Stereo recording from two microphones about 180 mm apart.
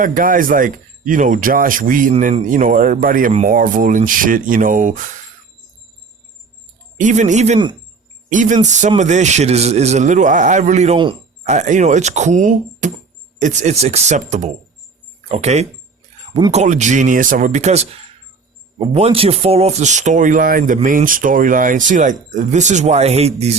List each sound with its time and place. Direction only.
0.0 s speech: 50° right (ahead or behind)
6.9 s a man's voice: 45° right (ahead or behind); by 11.2 s 30° right (ahead or behind)
11.4 s a man's voice: 40° right (ahead or behind)